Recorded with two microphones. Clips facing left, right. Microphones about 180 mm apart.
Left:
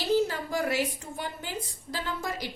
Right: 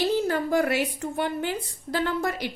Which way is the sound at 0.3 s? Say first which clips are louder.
Right 7 dB; 60° right (ahead or behind).